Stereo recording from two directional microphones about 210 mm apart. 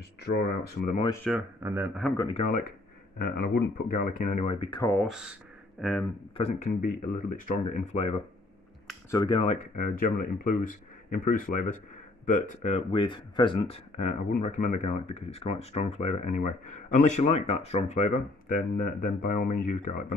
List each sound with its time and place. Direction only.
0.2 s speech: 50° left (ahead or behind)
1.3 s speech: centre (ahead or behind)
1.6 s a man's voice: 10° right (ahead or behind)
2.1 s speech: 25° left (ahead or behind)
3.2 s speech: 45° left (ahead or behind); by 4.9 s 20° left (ahead or behind)
4.9 s speech: centre (ahead or behind)
6.3 s speech: 30° left (ahead or behind)